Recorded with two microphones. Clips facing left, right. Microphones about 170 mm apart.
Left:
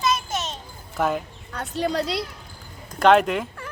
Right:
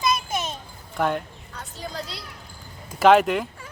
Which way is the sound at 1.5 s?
70° left (ahead or behind).